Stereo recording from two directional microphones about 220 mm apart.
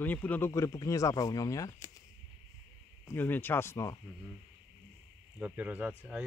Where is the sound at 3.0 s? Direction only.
10° left (ahead or behind).